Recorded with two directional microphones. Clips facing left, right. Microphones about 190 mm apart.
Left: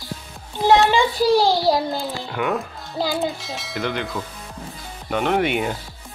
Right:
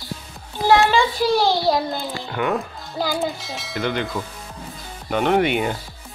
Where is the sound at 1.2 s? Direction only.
35° left (ahead or behind).